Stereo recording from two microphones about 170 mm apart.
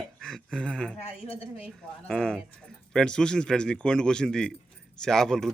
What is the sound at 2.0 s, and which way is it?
A man's voice, 5° left (ahead or behind).